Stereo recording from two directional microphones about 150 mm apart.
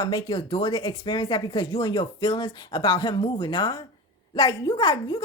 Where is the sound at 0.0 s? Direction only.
30° left (ahead or behind).